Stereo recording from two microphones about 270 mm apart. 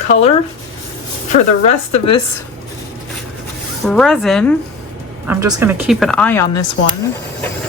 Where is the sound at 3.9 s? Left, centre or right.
Centre.